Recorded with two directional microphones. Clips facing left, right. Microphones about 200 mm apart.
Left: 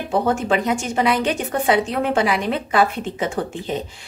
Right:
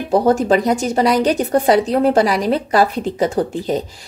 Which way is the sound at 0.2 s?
40° right (ahead or behind).